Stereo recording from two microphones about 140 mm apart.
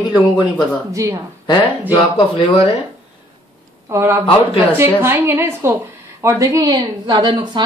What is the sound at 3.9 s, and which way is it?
A woman's voice, 20° right (ahead or behind).